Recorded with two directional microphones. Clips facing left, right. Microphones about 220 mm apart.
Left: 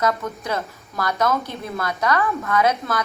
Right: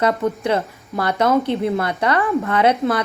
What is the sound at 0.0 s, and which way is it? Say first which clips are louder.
A woman's voice: right 5 dB; 30° right (ahead or behind).